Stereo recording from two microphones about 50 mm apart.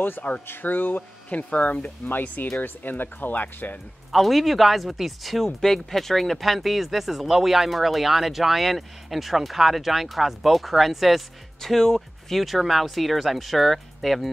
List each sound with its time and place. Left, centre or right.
0.5 s speech: left
4.1 s speech: centre